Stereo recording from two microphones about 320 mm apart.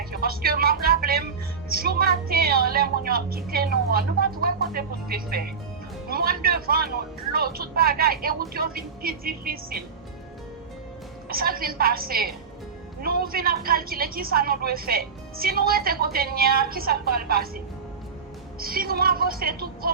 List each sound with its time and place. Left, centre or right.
0.0 s a woman's voice: right
11.3 s a woman's voice: right
18.6 s a woman's voice: right